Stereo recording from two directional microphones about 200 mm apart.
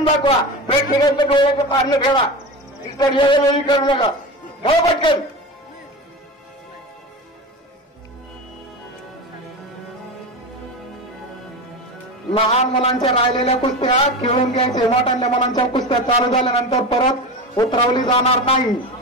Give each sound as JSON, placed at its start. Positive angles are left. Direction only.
{"t": 0.0, "sound": "a man's voice", "side_deg": 25}
{"t": 12.3, "sound": "a man's voice", "side_deg": 30}
{"t": 14.7, "sound": "a man's voice", "side_deg": 20}